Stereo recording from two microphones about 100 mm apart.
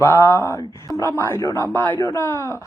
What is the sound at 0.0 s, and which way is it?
Speech, 25° left (ahead or behind).